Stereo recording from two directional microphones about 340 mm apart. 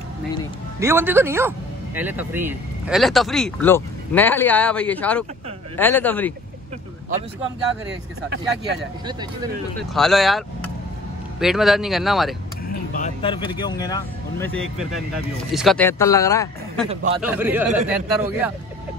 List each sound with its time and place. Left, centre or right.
0.7 s a man's voice: centre
9.9 s speech: centre
12.6 s speech: left; by 16.8 s centre
16.9 s a man's voice: centre
17.2 s speech: centre